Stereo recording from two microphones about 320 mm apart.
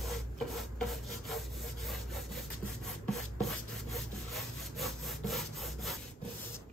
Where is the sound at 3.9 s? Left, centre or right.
Centre.